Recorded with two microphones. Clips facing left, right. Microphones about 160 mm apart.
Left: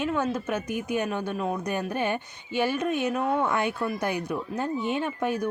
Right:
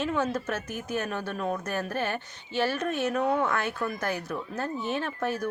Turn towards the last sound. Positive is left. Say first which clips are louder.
# left 3 dB
turn(degrees=15)  # may be behind; listen again after turning